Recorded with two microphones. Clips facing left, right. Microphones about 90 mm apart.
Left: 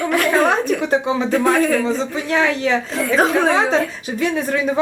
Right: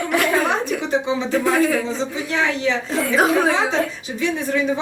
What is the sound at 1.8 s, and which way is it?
Speech, 55° left (ahead or behind).